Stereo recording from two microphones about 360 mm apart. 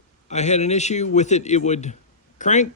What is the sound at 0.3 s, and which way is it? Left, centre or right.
Speech, centre.